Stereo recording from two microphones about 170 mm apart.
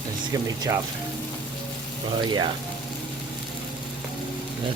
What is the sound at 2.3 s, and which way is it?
Speech, 25° right (ahead or behind).